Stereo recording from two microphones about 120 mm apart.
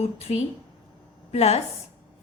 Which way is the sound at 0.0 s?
60° left (ahead or behind).